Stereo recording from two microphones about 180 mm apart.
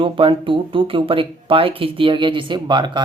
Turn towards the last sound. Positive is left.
turn(degrees=-25)  # may be behind; listen again after turning